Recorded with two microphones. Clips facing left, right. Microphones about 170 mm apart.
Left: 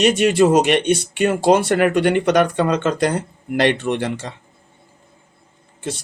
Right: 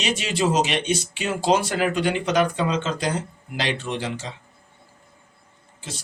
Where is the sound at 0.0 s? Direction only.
55° left (ahead or behind).